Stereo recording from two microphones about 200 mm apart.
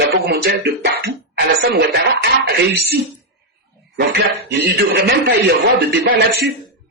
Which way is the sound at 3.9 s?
60° right (ahead or behind).